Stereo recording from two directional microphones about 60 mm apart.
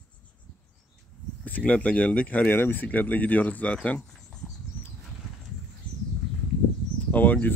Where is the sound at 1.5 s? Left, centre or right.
Left.